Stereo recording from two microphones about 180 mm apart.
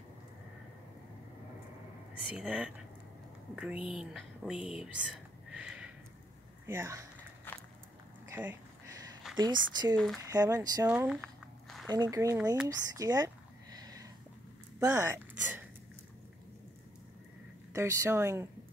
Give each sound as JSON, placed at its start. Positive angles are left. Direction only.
{"t": 2.3, "sound": "speech", "side_deg": -5}
{"t": 6.6, "sound": "speech", "side_deg": -15}
{"t": 7.5, "sound": "walk", "side_deg": 10}
{"t": 8.3, "sound": "a sound", "side_deg": -10}
{"t": 9.4, "sound": "speech", "side_deg": -20}
{"t": 9.9, "sound": "speech", "side_deg": 0}
{"t": 10.2, "sound": "speech", "side_deg": -20}
{"t": 10.9, "sound": "speech", "side_deg": -5}
{"t": 11.9, "sound": "speech", "side_deg": -20}
{"t": 12.6, "sound": "a sound", "side_deg": -20}
{"t": 14.8, "sound": "speech", "side_deg": -15}
{"t": 17.7, "sound": "speech", "side_deg": -15}